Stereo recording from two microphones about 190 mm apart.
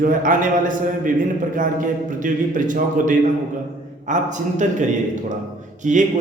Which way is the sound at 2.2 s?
45° right (ahead or behind).